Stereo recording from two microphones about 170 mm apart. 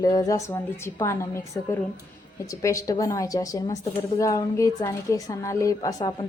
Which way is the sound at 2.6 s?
20° left (ahead or behind).